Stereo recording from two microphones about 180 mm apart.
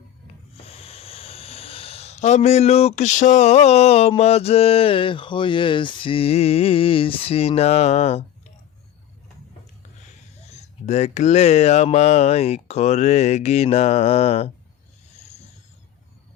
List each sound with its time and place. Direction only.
0.5 s speech: 35° left (ahead or behind)
10.5 s speech: 40° left (ahead or behind)